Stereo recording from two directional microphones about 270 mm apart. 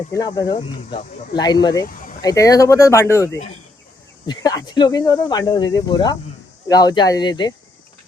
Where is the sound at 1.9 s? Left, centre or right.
Left.